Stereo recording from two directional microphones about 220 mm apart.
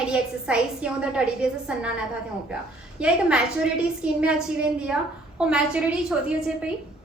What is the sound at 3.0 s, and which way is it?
A woman's voice, 5° right (ahead or behind).